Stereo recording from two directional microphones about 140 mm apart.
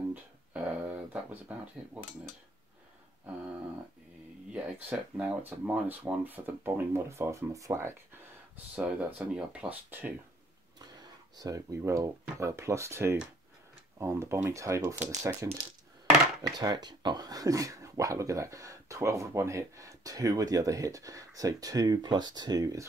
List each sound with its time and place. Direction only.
0.1 s a sound: 10° right (ahead or behind)
4.5 s speech: 10° right (ahead or behind)
8.7 s speech: 10° right (ahead or behind)
10.8 s speech: 30° right (ahead or behind)
16.5 s speech: 30° right (ahead or behind)